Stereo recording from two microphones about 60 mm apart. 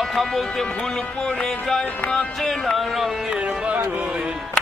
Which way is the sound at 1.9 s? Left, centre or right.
Left.